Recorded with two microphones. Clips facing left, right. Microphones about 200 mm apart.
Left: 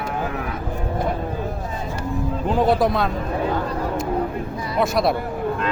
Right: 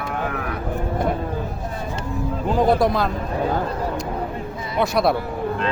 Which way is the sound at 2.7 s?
Centre (ahead or behind).